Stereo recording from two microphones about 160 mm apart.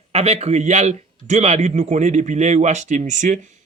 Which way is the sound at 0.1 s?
40° right (ahead or behind).